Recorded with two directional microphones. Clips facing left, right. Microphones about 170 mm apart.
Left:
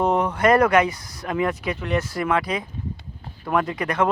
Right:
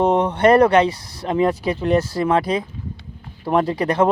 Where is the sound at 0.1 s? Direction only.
30° right (ahead or behind).